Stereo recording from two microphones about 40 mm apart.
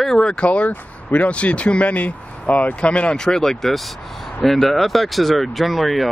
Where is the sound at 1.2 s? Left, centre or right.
Left.